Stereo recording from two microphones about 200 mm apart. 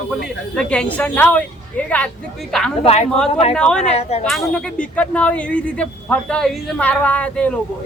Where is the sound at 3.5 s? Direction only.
5° left (ahead or behind).